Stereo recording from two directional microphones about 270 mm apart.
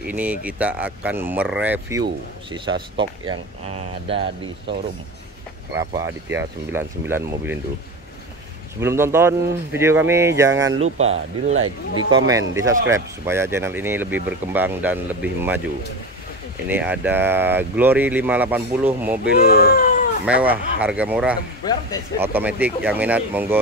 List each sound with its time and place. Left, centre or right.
0.0 s speech: centre
5.9 s speech: centre
8.8 s speech: centre
11.0 s speech: right
11.5 s speech: right
12.3 s speech: centre
16.6 s speech: centre
19.4 s speech: left
20.2 s speech: centre